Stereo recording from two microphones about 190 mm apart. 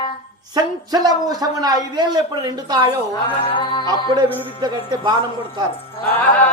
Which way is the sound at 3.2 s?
25° left (ahead or behind).